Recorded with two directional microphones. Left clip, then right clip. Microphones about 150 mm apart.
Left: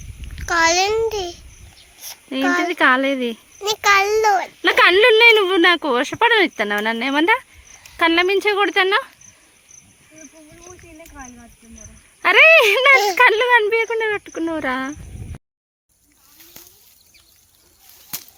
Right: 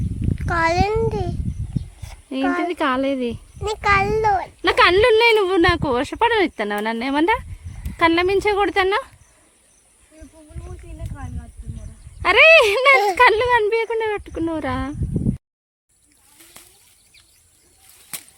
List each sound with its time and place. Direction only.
0.3 s a child's voice: 10° right (ahead or behind); by 4.5 s 10° left (ahead or behind)
4.6 s speech: 10° right (ahead or behind)
10.2 s snake: centre (ahead or behind)
12.2 s speech: 15° right (ahead or behind)